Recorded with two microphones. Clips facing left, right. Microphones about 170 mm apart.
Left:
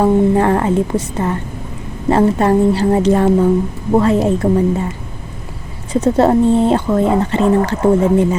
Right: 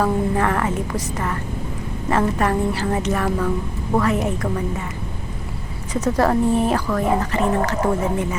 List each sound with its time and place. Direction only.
0.0 s speech: 30° left (ahead or behind)